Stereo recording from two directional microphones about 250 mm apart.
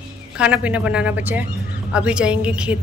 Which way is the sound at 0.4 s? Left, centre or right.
Centre.